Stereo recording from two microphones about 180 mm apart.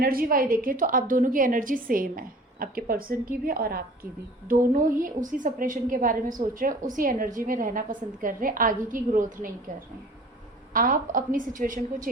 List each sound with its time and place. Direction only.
0.0 s a woman's voice: 55° right (ahead or behind)
10.8 s a woman's voice: 50° right (ahead or behind)